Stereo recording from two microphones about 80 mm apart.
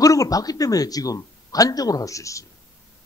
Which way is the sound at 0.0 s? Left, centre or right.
Left.